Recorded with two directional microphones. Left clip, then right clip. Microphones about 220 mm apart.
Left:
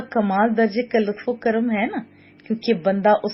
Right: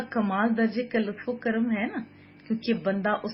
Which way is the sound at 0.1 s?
25° left (ahead or behind).